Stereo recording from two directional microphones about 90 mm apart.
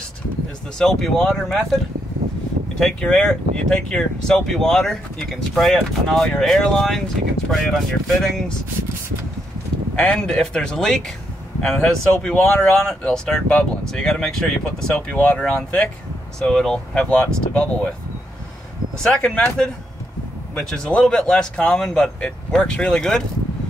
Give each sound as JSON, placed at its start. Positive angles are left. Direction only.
{"t": 0.7, "sound": "speech", "side_deg": 5}
{"t": 2.8, "sound": "speech", "side_deg": 10}
{"t": 9.9, "sound": "speech", "side_deg": 10}
{"t": 19.0, "sound": "speech", "side_deg": 10}